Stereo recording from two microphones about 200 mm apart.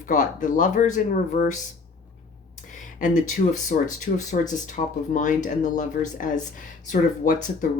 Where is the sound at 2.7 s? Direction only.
40° left (ahead or behind).